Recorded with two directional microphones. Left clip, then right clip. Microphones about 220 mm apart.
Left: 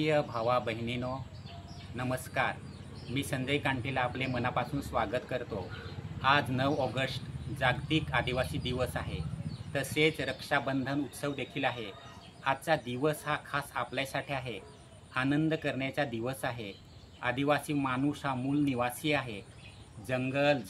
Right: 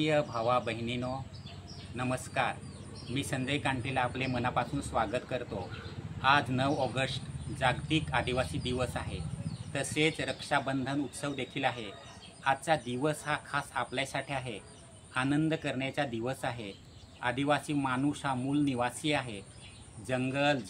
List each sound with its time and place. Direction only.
0.0 s speech: centre (ahead or behind)